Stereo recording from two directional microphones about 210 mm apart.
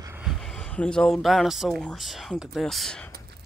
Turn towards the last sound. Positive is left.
turn(degrees=5)  # may be behind; listen again after turning